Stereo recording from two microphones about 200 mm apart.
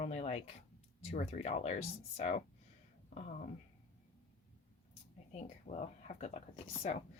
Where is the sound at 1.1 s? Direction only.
35° left (ahead or behind).